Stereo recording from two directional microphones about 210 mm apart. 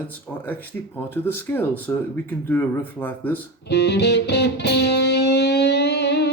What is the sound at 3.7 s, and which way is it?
Music, 55° left (ahead or behind).